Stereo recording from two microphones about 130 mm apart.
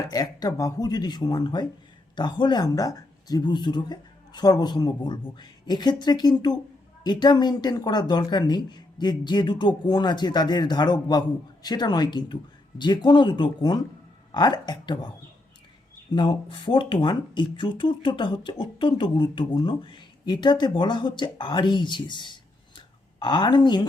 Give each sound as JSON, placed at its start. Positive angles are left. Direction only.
{"t": 0.1, "sound": "speech", "side_deg": 30}
{"t": 16.1, "sound": "speech", "side_deg": 35}